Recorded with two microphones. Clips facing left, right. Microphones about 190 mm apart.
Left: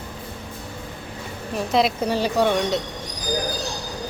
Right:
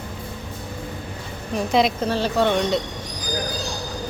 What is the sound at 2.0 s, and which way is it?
Speech, 10° left (ahead or behind).